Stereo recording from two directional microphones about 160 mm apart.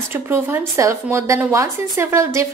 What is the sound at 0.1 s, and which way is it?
A woman's voice, 15° right (ahead or behind).